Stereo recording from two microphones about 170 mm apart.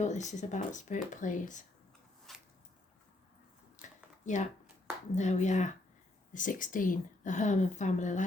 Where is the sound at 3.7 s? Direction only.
45° left (ahead or behind).